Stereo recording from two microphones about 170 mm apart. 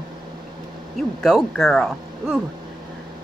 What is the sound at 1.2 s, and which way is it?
Speech, 5° left (ahead or behind).